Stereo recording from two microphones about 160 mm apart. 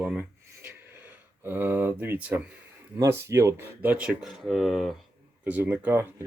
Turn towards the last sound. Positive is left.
turn(degrees=-15)  # may be behind; listen again after turning